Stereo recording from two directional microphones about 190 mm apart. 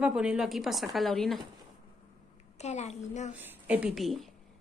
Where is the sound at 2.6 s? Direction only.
35° left (ahead or behind).